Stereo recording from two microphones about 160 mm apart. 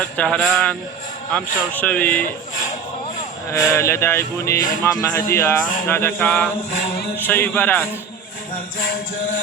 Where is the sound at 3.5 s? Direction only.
15° left (ahead or behind).